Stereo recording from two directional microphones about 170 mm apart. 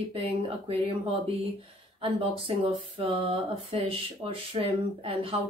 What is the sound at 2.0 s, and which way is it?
Speech, 30° right (ahead or behind).